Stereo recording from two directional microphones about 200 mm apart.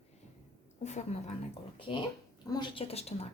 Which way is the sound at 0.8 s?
35° left (ahead or behind).